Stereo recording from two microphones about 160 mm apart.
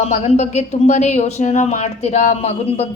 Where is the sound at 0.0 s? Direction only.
40° left (ahead or behind).